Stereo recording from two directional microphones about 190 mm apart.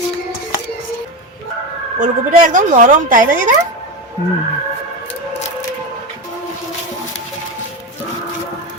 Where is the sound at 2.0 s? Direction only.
40° right (ahead or behind).